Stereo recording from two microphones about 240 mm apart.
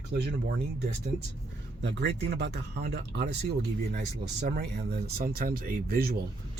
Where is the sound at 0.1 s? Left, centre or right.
Right.